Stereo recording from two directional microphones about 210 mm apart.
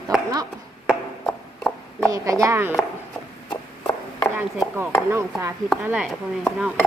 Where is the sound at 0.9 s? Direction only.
Centre (ahead or behind).